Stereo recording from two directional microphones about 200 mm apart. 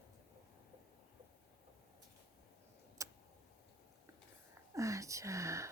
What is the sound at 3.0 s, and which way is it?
Tick, 15° right (ahead or behind).